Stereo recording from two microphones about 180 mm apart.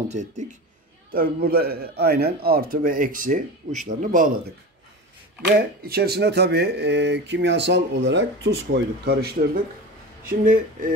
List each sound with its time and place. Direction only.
0.1 s a man's voice: 40° right (ahead or behind)
1.1 s a man's voice: 55° right (ahead or behind)
5.9 s speech: 60° right (ahead or behind)
10.2 s a man's voice: 50° right (ahead or behind)